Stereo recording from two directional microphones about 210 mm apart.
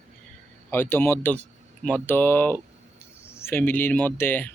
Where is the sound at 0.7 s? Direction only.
10° left (ahead or behind).